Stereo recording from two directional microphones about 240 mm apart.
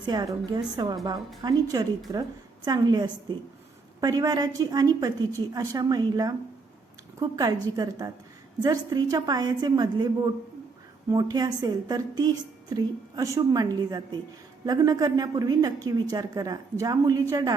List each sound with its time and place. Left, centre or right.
0.0 s a woman's voice: centre